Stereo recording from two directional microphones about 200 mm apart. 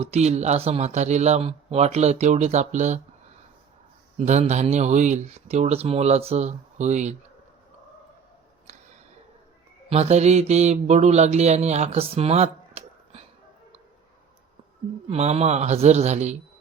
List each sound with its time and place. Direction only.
0.0 s speech: 30° right (ahead or behind)
4.2 s speech: 35° right (ahead or behind)
9.9 s mantra: 35° right (ahead or behind)
15.1 s speech: 30° right (ahead or behind)